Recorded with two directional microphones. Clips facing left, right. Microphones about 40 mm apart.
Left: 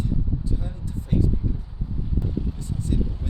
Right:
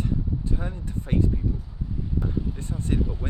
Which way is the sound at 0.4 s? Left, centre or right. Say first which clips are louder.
Right 1 dB; right.